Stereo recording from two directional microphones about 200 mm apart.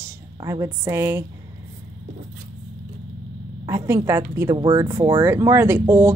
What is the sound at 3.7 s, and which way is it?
Speech, 15° right (ahead or behind).